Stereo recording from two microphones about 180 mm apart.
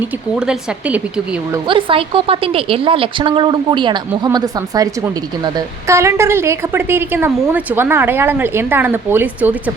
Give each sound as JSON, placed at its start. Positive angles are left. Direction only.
{"t": 0.3, "sound": "a woman's voice", "side_deg": -5}
{"t": 1.6, "sound": "a woman's voice", "side_deg": -30}